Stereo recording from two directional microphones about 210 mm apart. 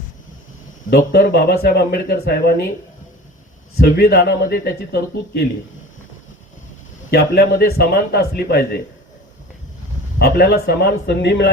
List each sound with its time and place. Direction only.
0.9 s a man's voice: 50° left (ahead or behind)
3.8 s a man's voice: 50° left (ahead or behind)
7.1 s a man's voice: 50° left (ahead or behind)
10.2 s a man's voice: 50° left (ahead or behind)